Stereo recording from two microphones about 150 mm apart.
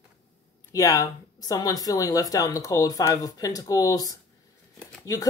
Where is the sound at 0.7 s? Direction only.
25° left (ahead or behind).